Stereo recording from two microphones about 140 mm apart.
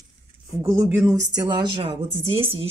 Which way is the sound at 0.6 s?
20° right (ahead or behind).